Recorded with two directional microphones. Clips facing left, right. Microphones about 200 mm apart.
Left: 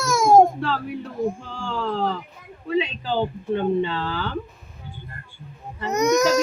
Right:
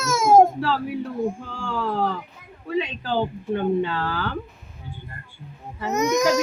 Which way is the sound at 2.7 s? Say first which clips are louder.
Left 2 dB; 5° right (ahead or behind).